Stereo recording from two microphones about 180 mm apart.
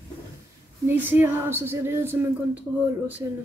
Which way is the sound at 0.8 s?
10° right (ahead or behind).